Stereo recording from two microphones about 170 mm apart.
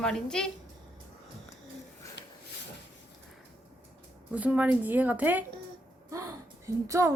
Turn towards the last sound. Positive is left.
turn(degrees=-15)  # may be behind; listen again after turning